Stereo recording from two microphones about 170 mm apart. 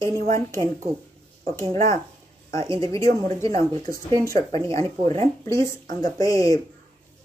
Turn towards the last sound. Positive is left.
turn(degrees=20)  # may be behind; listen again after turning